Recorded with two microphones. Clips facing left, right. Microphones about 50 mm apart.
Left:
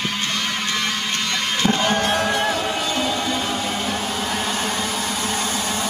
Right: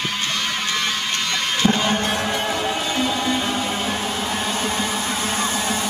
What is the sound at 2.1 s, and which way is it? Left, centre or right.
Music, left.